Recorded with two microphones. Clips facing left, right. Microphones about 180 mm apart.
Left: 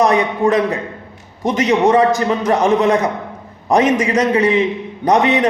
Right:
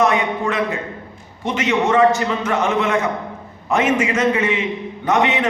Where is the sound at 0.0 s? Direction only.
35° left (ahead or behind).